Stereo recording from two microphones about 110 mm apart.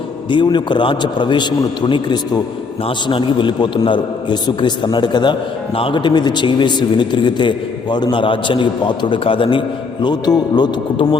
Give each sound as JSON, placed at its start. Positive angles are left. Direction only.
{"t": 0.3, "sound": "a man's voice", "side_deg": 45}